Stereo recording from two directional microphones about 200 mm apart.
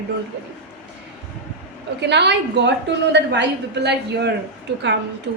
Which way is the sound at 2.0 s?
60° right (ahead or behind).